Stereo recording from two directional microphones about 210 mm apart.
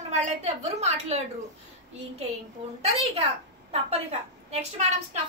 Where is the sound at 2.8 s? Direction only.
30° right (ahead or behind).